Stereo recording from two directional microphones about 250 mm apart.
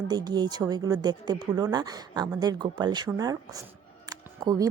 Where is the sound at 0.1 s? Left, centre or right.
Centre.